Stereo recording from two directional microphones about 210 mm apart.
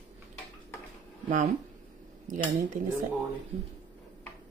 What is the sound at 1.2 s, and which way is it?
Speech, 35° right (ahead or behind).